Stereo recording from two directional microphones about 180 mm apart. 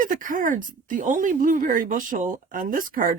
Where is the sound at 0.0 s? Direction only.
50° right (ahead or behind).